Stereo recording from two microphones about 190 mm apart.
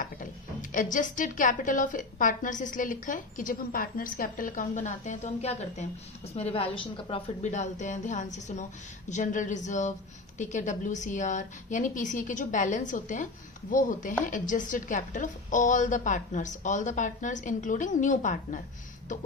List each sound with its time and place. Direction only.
0.7 s a woman's voice: 45° left (ahead or behind)